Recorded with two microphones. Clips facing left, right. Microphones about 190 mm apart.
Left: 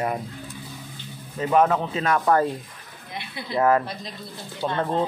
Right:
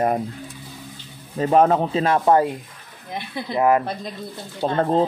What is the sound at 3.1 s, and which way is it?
Speech, 45° right (ahead or behind).